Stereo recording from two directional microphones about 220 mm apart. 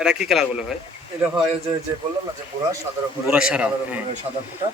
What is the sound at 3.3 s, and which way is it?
Speech, 5° right (ahead or behind).